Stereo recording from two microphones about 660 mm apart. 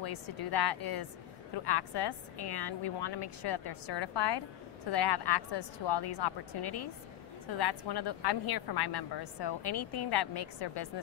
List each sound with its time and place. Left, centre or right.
0.5 s a woman's voice: left